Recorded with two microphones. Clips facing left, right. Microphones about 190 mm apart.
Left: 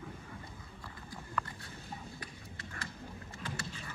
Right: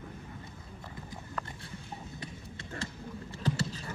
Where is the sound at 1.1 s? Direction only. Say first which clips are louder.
Left 2 dB; 25° right (ahead or behind).